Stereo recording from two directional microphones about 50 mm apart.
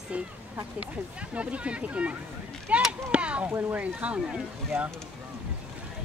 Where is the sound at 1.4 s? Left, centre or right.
Right.